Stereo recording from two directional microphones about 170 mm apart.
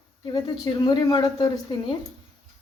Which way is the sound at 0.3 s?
25° left (ahead or behind).